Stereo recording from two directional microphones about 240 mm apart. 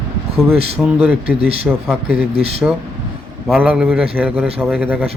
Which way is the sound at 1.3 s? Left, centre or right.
Right.